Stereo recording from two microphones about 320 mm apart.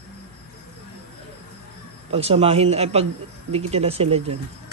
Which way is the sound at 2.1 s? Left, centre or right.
Centre.